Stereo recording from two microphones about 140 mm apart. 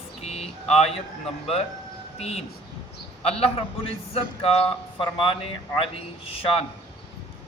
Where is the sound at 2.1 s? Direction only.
50° left (ahead or behind).